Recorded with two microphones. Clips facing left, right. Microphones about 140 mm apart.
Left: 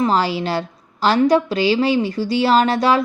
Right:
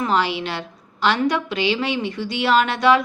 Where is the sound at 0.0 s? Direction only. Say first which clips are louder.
Left 3 dB; 35° left (ahead or behind).